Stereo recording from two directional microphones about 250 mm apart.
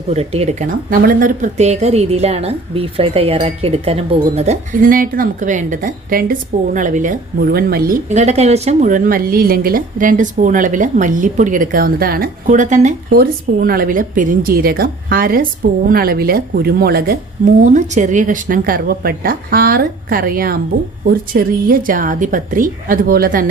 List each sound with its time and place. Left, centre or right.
0.1 s a woman's voice: right